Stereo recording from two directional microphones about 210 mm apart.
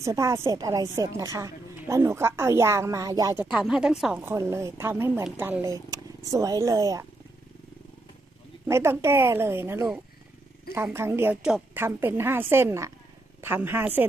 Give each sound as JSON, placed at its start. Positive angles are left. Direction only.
{"t": 0.0, "sound": "a woman's voice", "side_deg": -15}
{"t": 3.4, "sound": "a woman's voice", "side_deg": -5}
{"t": 8.6, "sound": "a woman's voice", "side_deg": -10}